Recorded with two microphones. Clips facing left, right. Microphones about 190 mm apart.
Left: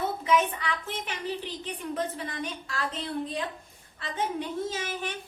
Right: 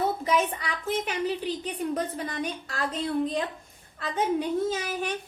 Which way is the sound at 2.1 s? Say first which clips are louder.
Right 3 dB; 45° right (ahead or behind).